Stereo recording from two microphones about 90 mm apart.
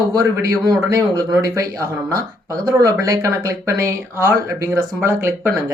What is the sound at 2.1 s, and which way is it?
Speech, 45° right (ahead or behind).